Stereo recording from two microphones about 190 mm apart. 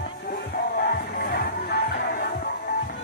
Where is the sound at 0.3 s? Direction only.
50° left (ahead or behind).